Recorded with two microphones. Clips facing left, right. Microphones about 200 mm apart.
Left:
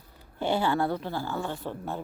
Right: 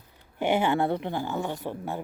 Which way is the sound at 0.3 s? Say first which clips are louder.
Right 2 dB; 20° right (ahead or behind).